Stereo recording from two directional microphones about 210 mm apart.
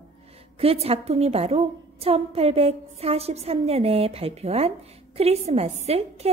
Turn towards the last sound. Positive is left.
turn(degrees=-30)  # may be behind; listen again after turning